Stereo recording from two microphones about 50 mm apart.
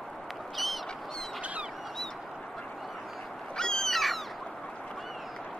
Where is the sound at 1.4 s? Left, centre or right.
Right.